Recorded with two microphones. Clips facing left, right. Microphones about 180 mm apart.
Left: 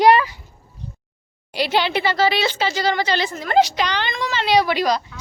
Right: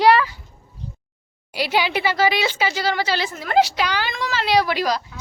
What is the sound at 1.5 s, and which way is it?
Speech, 10° right (ahead or behind).